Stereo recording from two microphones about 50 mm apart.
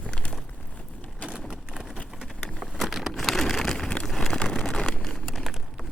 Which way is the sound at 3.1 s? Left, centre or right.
Centre.